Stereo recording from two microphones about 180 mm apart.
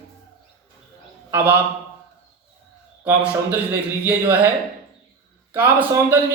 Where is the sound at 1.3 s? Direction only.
10° right (ahead or behind).